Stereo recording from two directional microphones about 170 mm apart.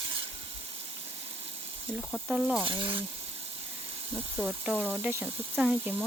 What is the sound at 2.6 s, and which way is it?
Sizzle, 30° right (ahead or behind).